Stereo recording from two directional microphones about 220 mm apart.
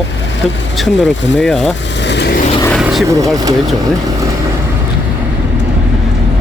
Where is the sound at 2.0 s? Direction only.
50° left (ahead or behind).